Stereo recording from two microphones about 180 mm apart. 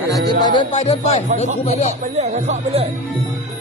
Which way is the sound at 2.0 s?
35° right (ahead or behind).